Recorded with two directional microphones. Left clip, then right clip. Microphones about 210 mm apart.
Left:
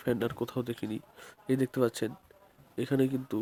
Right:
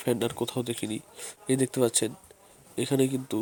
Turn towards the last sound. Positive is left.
turn(degrees=0)  # may be behind; listen again after turning